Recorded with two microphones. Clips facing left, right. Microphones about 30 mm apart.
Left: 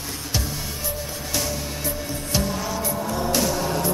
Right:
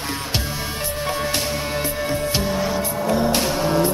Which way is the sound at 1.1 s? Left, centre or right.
Right.